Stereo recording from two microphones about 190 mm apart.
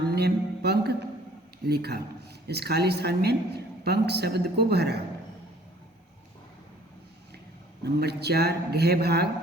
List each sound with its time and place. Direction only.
0.2 s a sound: 55° right (ahead or behind)
1.6 s speech: 60° right (ahead or behind)
7.9 s speech: 60° right (ahead or behind)